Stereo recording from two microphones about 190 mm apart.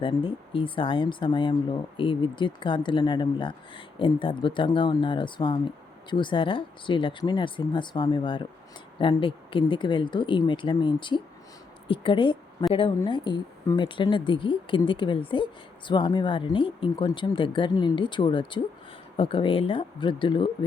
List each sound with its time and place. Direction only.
0.0 s speech: 25° left (ahead or behind)